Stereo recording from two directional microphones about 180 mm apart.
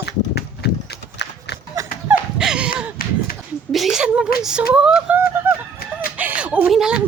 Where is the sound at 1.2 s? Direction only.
75° left (ahead or behind).